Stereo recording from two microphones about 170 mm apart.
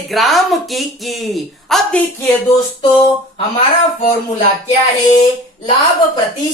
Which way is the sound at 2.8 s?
30° left (ahead or behind).